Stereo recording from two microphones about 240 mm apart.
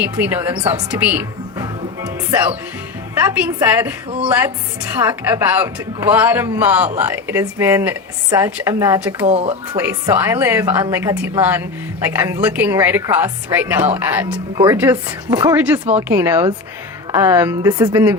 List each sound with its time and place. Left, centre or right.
0.0 s a woman's voice: centre
1.6 s music: centre
3.2 s a woman's voice: centre
9.2 s speech: right
9.7 s a woman's voice: centre